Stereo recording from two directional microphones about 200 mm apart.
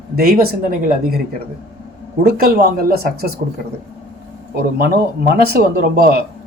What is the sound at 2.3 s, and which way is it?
Speech, 50° right (ahead or behind).